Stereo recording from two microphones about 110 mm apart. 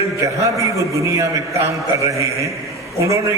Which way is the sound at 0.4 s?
30° right (ahead or behind).